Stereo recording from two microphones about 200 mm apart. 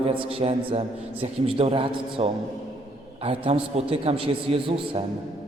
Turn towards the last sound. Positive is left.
turn(degrees=-25)  # may be behind; listen again after turning